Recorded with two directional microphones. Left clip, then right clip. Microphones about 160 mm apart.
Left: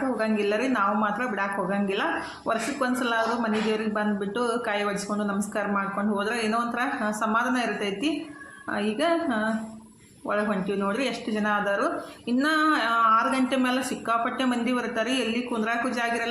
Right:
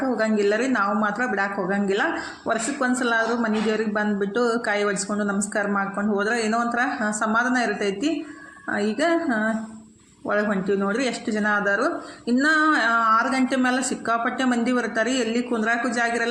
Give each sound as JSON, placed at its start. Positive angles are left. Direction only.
{"t": 0.2, "sound": "a man's voice", "side_deg": -25}